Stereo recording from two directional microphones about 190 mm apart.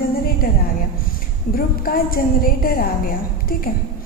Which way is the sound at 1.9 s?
50° left (ahead or behind).